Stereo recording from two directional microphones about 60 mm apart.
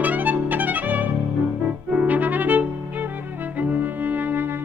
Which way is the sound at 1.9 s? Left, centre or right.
Right.